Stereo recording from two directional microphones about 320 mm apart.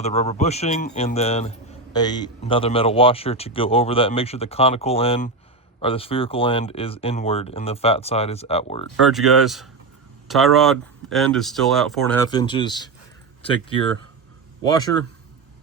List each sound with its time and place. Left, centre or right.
0.0 s speech: centre
9.1 s speech: centre
12.3 s speech: centre
14.6 s speech: centre